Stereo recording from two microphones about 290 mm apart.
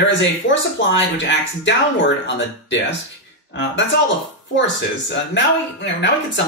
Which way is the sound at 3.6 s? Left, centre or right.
Left.